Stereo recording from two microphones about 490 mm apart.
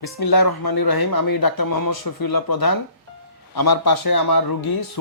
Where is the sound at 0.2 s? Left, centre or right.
Left.